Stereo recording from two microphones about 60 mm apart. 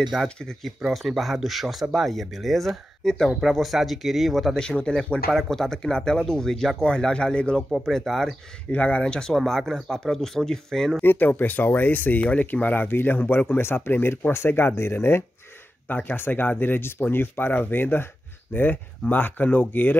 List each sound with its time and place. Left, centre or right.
0.0 s speech: centre
0.9 s speech: centre
3.3 s speech: centre
4.6 s speech: centre
5.3 s speech: centre
7.7 s speech: centre
8.7 s speech: left
9.3 s speech: centre
11.0 s speech: left
15.9 s speech: left